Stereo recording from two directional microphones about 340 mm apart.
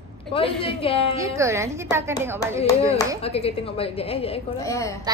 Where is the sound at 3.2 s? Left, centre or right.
Centre.